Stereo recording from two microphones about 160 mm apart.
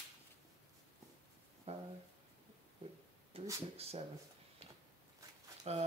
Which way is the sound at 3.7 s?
40° right (ahead or behind).